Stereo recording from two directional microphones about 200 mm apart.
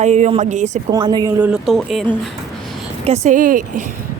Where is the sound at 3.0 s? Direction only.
35° right (ahead or behind).